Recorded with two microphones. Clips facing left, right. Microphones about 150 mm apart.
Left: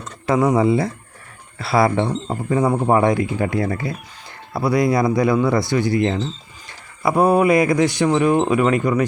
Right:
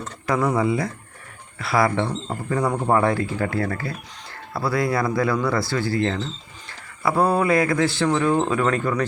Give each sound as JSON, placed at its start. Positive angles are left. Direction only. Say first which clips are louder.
{"t": 0.3, "sound": "speech", "louder": "left 5 dB", "side_deg": 25}